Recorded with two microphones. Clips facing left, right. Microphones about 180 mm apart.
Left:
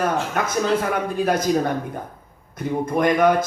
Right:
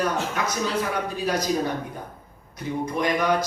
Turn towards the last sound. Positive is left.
turn(degrees=50)  # may be behind; listen again after turning